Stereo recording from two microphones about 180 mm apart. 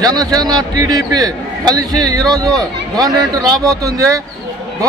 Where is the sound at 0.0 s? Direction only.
20° right (ahead or behind).